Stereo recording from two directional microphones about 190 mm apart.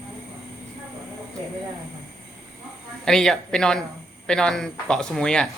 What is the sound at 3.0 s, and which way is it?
Speech, 5° left (ahead or behind).